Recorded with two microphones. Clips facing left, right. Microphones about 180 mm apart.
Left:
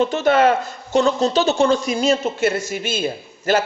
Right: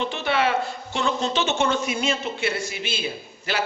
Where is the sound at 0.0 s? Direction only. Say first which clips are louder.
Left 8 dB; 45° left (ahead or behind).